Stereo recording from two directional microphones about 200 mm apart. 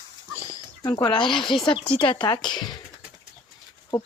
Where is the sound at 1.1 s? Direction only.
25° left (ahead or behind).